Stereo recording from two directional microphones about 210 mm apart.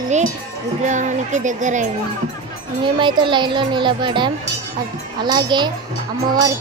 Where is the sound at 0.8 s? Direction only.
35° right (ahead or behind).